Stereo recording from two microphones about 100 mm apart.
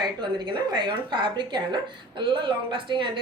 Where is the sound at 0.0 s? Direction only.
50° right (ahead or behind).